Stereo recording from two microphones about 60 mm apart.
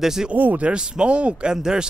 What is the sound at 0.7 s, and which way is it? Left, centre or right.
Speech, centre.